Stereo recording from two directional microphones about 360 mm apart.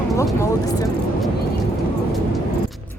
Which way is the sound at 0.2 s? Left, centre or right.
Centre.